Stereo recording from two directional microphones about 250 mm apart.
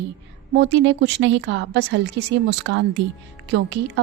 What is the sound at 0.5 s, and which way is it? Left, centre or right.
A woman's voice, right.